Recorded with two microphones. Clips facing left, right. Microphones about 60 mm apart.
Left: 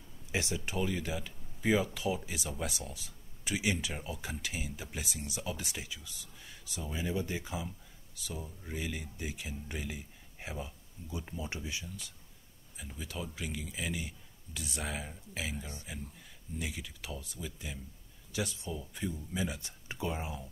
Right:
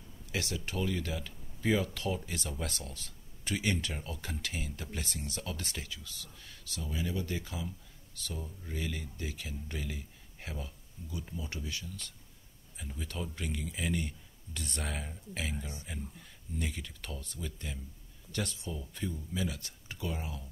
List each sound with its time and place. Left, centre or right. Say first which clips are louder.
0.3 s speech: left 1 dB; centre
12.7 s speech: right 1 dB; centre; by 20.4 s left